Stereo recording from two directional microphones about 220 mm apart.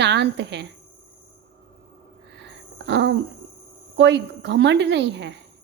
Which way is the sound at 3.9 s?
50° right (ahead or behind).